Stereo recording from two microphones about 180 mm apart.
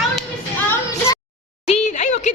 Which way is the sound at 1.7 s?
40° left (ahead or behind).